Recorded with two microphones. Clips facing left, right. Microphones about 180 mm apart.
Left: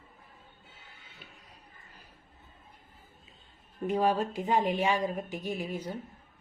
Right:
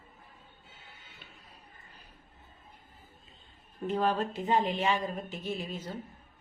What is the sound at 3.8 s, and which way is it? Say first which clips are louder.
A woman's voice: left 2 dB; 10° left (ahead or behind).